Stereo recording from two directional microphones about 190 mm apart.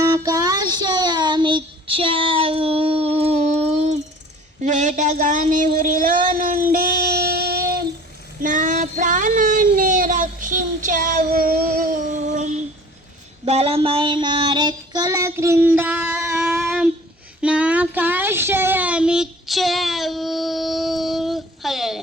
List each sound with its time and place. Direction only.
0.0 s child singing: 20° right (ahead or behind); by 3.9 s 35° right (ahead or behind)
4.6 s a sound: 40° right (ahead or behind)
8.4 s child singing: 45° right (ahead or behind); by 22.0 s centre (ahead or behind)